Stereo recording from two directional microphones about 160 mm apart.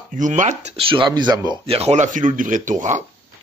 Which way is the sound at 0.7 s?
35° right (ahead or behind).